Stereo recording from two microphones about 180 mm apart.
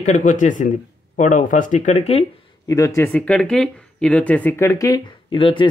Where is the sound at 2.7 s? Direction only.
15° left (ahead or behind).